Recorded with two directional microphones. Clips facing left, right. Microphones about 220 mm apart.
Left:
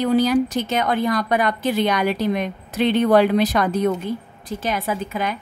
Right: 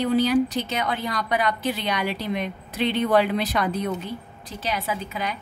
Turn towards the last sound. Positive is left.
turn(degrees=50)  # may be behind; listen again after turning